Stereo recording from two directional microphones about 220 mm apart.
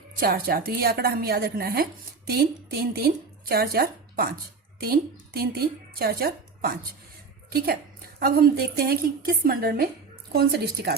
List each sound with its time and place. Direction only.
0.2 s a woman's voice: 45° right (ahead or behind)